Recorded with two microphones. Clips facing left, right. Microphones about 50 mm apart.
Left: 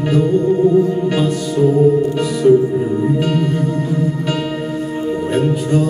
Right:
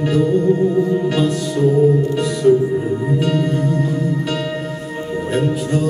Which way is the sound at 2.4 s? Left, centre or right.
Centre.